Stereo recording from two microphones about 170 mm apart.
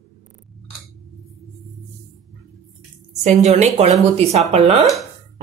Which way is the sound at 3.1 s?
40° right (ahead or behind).